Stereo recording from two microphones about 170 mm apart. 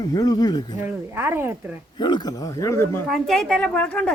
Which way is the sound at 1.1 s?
15° right (ahead or behind).